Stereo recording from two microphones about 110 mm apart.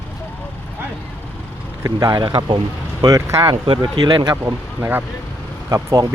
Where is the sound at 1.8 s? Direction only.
35° right (ahead or behind).